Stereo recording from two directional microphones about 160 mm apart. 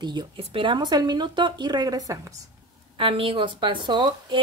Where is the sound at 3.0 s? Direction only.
35° right (ahead or behind).